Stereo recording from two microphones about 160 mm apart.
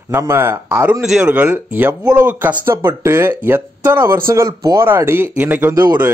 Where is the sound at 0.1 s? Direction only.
15° right (ahead or behind).